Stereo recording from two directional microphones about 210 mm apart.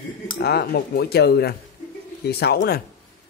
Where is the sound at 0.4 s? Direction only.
50° left (ahead or behind).